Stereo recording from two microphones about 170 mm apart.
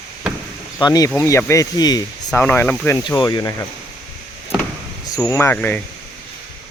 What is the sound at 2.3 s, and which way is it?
Speech, 10° left (ahead or behind).